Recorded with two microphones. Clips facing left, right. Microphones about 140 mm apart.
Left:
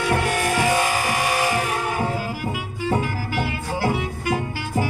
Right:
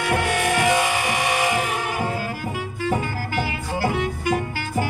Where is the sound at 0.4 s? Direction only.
15° right (ahead or behind).